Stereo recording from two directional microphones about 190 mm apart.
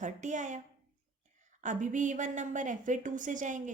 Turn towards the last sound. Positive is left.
turn(degrees=-40)  # may be behind; listen again after turning